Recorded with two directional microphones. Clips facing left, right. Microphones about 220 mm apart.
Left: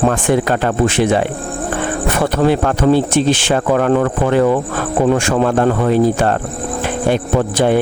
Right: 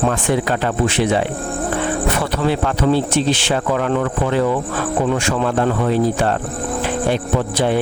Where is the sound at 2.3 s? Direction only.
50° left (ahead or behind).